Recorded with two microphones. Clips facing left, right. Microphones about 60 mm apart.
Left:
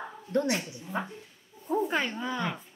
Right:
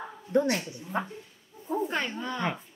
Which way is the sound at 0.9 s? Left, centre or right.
Centre.